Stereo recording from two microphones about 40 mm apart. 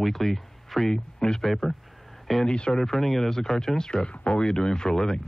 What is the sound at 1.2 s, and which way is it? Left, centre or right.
Speech, centre.